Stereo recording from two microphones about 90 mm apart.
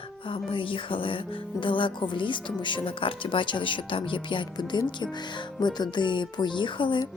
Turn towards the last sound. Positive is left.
turn(degrees=60)  # may be behind; listen again after turning